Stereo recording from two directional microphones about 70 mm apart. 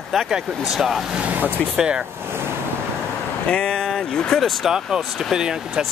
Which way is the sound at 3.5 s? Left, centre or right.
Centre.